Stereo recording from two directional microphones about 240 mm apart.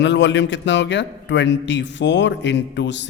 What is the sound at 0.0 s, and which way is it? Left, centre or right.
A man's voice, left.